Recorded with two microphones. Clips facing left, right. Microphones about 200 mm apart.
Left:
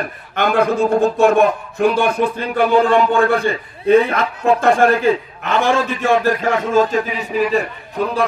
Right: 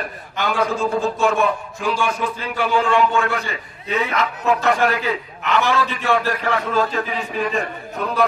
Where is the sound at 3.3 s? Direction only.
55° left (ahead or behind).